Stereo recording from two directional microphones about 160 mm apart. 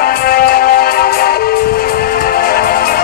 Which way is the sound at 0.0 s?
70° left (ahead or behind).